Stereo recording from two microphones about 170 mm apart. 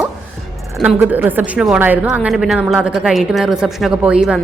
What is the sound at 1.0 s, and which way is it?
A woman's voice, 10° right (ahead or behind).